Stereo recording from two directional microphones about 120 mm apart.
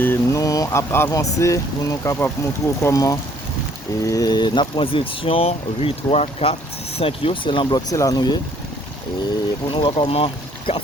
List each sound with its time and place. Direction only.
0.0 s a sound: 15° left (ahead or behind)
0.4 s speech: 30° left (ahead or behind); by 7.8 s 45° left (ahead or behind)
7.9 s speech: 30° left (ahead or behind)
9.7 s speech: 45° left (ahead or behind)